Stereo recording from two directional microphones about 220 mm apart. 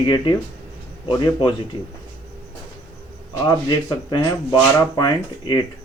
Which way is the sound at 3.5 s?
15° left (ahead or behind).